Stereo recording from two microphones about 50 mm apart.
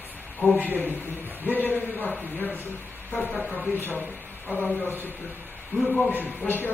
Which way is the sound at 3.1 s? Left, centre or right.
Left.